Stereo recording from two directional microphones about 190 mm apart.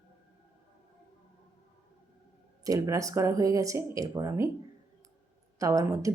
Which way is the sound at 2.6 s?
15° right (ahead or behind).